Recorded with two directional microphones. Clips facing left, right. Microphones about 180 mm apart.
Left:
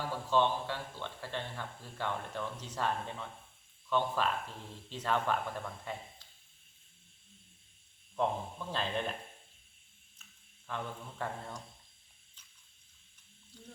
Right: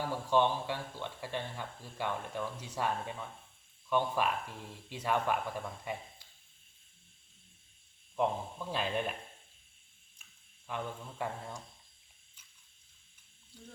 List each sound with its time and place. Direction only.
0.3 s speech: 15° right (ahead or behind)
8.1 s speech: 10° right (ahead or behind)
10.7 s speech: 15° right (ahead or behind)
13.5 s speech: 10° right (ahead or behind)